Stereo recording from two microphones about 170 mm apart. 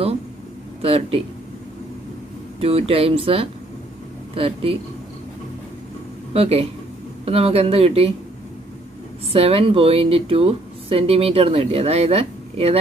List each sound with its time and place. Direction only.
0.8 s speech: 35° right (ahead or behind)
2.6 s speech: 35° right (ahead or behind)
6.3 s speech: 35° right (ahead or behind)
9.3 s speech: 35° right (ahead or behind)